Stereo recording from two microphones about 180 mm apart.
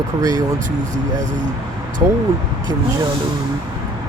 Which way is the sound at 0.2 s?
20° right (ahead or behind).